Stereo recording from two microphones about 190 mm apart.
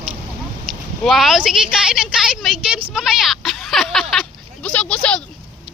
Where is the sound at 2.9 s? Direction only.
5° right (ahead or behind).